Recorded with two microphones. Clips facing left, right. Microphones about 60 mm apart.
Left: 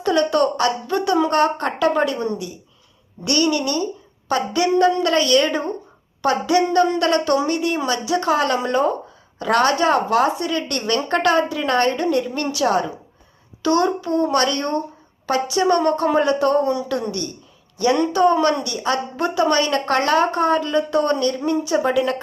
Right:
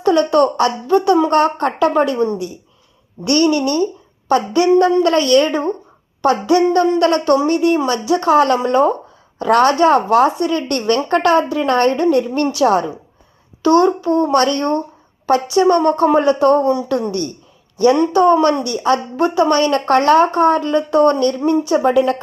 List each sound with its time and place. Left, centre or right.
0.0 s a woman's voice: right